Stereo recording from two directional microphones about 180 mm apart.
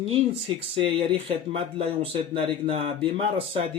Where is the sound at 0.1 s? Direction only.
30° right (ahead or behind).